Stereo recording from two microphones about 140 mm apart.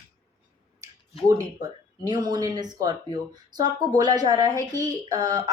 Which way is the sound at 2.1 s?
30° right (ahead or behind).